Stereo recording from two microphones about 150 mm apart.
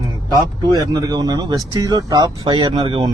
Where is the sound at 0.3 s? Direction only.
25° right (ahead or behind).